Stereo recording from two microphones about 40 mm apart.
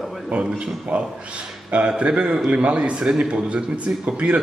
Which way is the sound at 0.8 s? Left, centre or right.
Right.